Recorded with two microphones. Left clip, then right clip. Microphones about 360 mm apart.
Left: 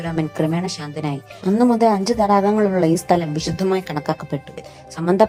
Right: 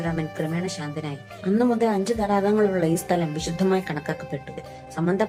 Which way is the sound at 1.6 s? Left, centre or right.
Centre.